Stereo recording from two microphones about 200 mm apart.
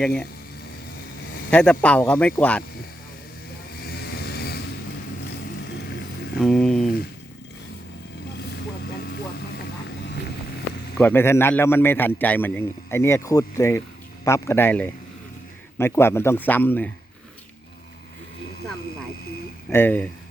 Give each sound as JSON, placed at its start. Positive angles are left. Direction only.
{"t": 0.0, "sound": "speech", "side_deg": 5}
{"t": 1.5, "sound": "a man's voice", "side_deg": 5}
{"t": 3.8, "sound": "vehicle", "side_deg": 50}
{"t": 6.4, "sound": "speech", "side_deg": 0}
{"t": 9.0, "sound": "vehicle", "side_deg": 55}
{"t": 10.9, "sound": "a man's voice", "side_deg": 10}
{"t": 19.7, "sound": "a man's voice", "side_deg": 10}